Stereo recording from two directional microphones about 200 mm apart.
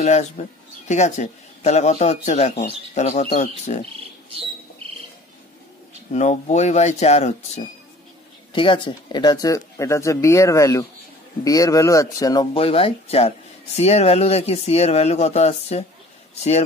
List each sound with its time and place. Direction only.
0.0 s speech: 35° left (ahead or behind)
6.1 s speech: 35° left (ahead or behind)